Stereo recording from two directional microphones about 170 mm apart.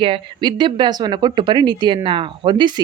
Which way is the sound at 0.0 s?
30° right (ahead or behind).